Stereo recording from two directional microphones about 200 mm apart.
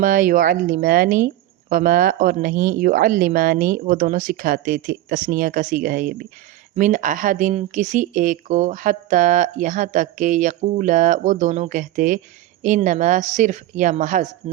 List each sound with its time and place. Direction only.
0.0 s speech: 45° right (ahead or behind)